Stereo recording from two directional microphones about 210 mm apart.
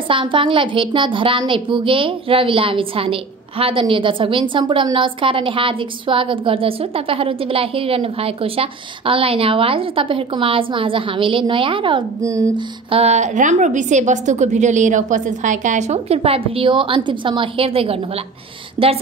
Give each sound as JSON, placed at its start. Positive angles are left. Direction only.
{"t": 0.1, "sound": "a woman's voice", "side_deg": -25}